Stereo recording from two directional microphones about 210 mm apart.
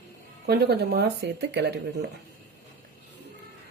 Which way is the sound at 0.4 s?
50° right (ahead or behind).